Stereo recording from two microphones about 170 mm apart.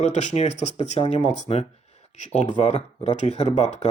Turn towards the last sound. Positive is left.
turn(degrees=40)  # may be behind; listen again after turning